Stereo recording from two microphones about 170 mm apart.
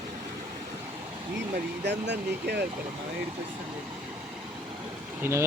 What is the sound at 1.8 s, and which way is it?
Speech, 90° right.